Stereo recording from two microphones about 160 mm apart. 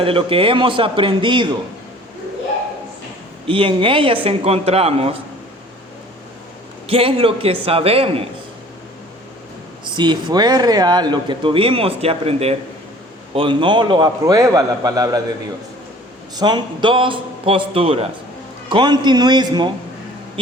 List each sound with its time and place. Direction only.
0.0 s a man's voice: 35° right (ahead or behind)
3.4 s a man's voice: 35° right (ahead or behind)
6.8 s a man's voice: 35° right (ahead or behind)
9.8 s speech: 30° right (ahead or behind)
16.3 s a man's voice: 25° right (ahead or behind)